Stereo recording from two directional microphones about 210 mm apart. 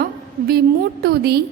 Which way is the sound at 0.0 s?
45° right (ahead or behind).